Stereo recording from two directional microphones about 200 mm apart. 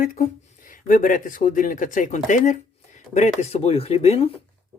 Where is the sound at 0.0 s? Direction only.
40° left (ahead or behind).